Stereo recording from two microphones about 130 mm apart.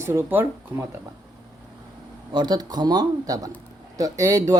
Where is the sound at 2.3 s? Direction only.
30° right (ahead or behind).